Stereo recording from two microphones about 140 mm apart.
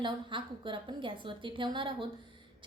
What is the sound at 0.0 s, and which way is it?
A woman's voice, 35° right (ahead or behind).